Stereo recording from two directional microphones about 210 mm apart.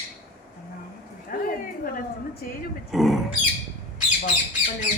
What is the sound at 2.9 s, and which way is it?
Speech, centre (ahead or behind).